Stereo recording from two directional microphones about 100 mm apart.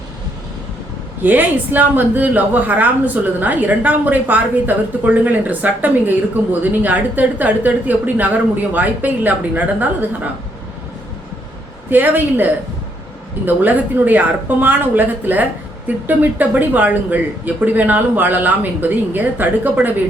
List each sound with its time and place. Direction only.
1.2 s a woman's voice: 20° right (ahead or behind)
11.9 s a woman's voice: 20° right (ahead or behind)